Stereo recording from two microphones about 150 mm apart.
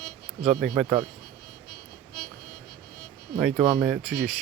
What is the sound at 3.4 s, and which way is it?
Speech, 5° right (ahead or behind).